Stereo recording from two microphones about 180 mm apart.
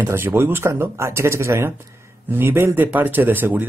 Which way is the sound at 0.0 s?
15° right (ahead or behind).